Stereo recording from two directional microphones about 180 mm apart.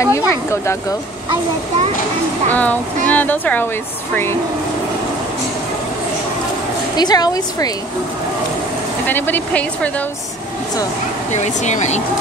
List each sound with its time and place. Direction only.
0.0 s speech: 15° left (ahead or behind)
2.5 s speech: 10° left (ahead or behind)
7.0 s a woman's voice: 20° left (ahead or behind)
9.0 s speech: 10° left (ahead or behind)
11.3 s speech: 40° left (ahead or behind)